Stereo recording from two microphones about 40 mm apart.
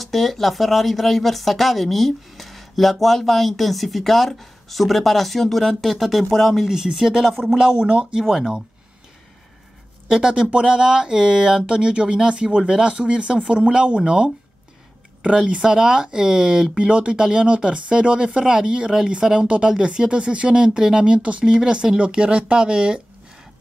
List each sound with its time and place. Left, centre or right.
0.0 s speech: centre
6.7 s speech: centre
8.2 s speech: centre
10.0 s speech: centre
15.6 s speech: centre